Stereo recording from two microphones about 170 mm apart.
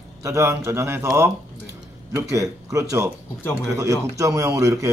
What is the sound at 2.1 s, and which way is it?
A man's voice, 20° right (ahead or behind).